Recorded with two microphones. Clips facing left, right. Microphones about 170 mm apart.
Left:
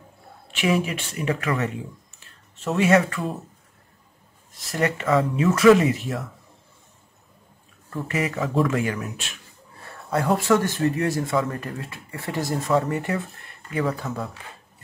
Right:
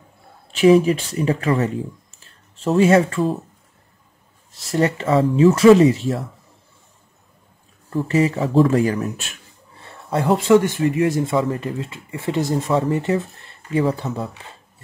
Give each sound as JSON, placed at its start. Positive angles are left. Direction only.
{"t": 0.6, "sound": "speech", "side_deg": -35}
{"t": 4.6, "sound": "speech", "side_deg": -30}
{"t": 7.9, "sound": "speech", "side_deg": -30}
{"t": 9.8, "sound": "speech", "side_deg": -25}